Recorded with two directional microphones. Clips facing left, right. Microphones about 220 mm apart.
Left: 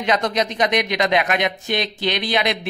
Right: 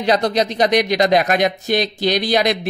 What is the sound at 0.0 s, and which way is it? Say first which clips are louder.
Speech: right 4 dB; 35° right (ahead or behind).